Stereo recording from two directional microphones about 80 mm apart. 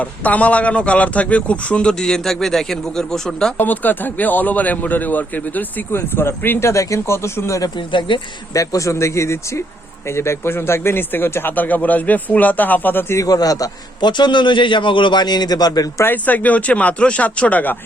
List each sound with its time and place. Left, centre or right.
0.0 s a man's voice: centre
3.6 s a man's voice: left
7.8 s a man's voice: left
8.5 s a man's voice: left
13.1 s a man's voice: left
14.1 s a man's voice: left
16.0 s a man's voice: left